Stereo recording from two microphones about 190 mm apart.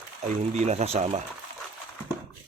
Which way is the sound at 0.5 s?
35° right (ahead or behind).